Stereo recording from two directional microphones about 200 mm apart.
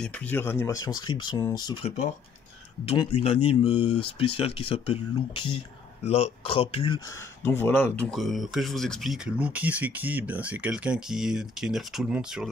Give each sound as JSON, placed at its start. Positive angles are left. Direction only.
{"t": 0.0, "sound": "speech", "side_deg": 5}
{"t": 7.4, "sound": "speech", "side_deg": 10}